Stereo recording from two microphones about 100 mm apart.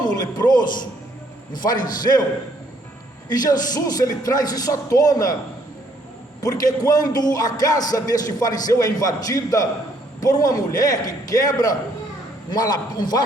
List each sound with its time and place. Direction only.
0.0 s a sound: 40° left (ahead or behind)
1.7 s a man's voice: 45° left (ahead or behind)
3.2 s speech: 40° left (ahead or behind)
6.4 s a man's voice: 40° left (ahead or behind)